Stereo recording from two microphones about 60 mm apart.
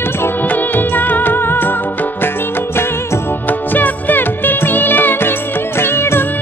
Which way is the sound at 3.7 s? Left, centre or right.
Left.